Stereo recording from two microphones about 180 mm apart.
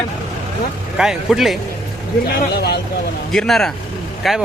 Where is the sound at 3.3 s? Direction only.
Centre (ahead or behind).